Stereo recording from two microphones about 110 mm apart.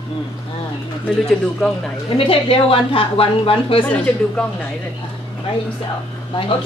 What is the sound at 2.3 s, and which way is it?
A woman's voice, 55° left (ahead or behind).